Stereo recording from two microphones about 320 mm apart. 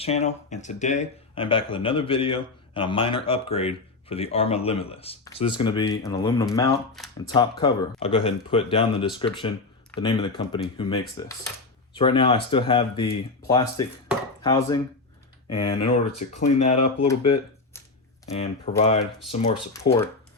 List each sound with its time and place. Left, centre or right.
0.0 s speech: centre
7.0 s speech: centre
7.3 s speech: centre
17.7 s a sound: centre
18.3 s speech: centre
19.7 s speech: centre